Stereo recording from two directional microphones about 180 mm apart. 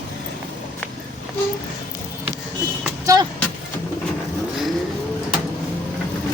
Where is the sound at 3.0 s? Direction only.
20° right (ahead or behind).